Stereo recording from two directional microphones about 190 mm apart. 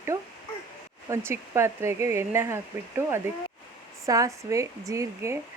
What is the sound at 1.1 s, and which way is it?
Speech, 15° right (ahead or behind).